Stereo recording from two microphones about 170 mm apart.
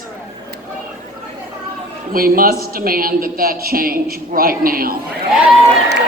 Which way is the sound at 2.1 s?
60° right (ahead or behind).